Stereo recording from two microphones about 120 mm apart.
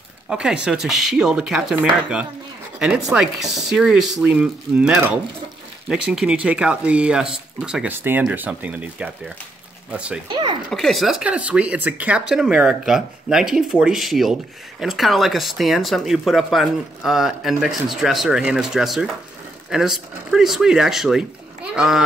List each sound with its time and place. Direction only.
0.3 s speech: 5° right (ahead or behind)
10.2 s speech: 40° right (ahead or behind)
10.7 s speech: centre (ahead or behind)